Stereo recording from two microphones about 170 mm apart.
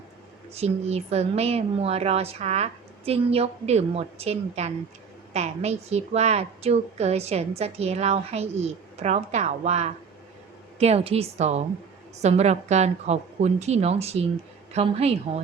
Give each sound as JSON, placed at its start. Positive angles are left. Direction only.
{"t": 0.5, "sound": "a woman's voice", "side_deg": -40}